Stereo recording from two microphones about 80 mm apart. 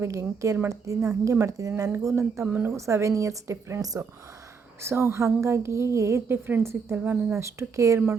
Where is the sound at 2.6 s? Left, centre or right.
Right.